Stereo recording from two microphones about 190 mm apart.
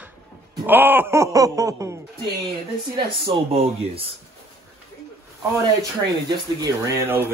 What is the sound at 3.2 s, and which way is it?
Speech, 30° right (ahead or behind).